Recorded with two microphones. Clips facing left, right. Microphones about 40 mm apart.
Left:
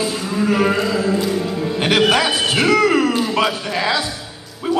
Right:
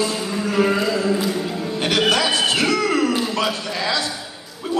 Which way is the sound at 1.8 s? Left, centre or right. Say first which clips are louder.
Left 3 dB; centre.